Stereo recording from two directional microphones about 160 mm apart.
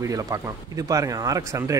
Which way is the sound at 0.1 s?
20° right (ahead or behind).